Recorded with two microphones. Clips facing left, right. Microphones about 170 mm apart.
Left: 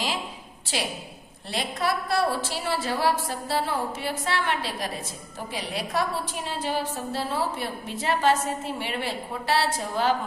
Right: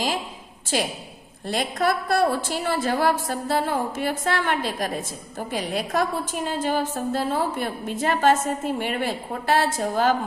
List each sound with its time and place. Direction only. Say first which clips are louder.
0.7 s a woman's voice: right 5 dB; 45° right (ahead or behind)